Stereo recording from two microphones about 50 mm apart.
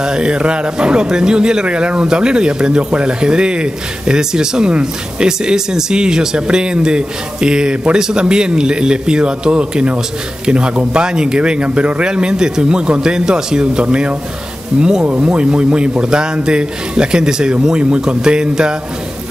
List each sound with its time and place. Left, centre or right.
0.0 s speech: centre